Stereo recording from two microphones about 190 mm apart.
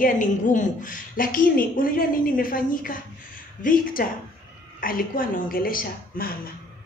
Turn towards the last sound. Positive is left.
turn(degrees=50)  # may be behind; listen again after turning